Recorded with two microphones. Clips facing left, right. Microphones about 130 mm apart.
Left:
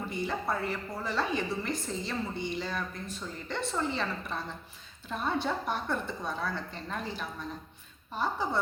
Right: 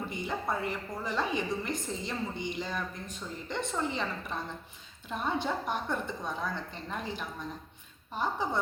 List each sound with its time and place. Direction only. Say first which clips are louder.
0.1 s a woman's voice: left 3 dB; 15° right (ahead or behind)